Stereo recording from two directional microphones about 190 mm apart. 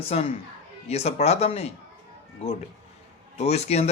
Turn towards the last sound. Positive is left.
turn(degrees=35)  # may be behind; listen again after turning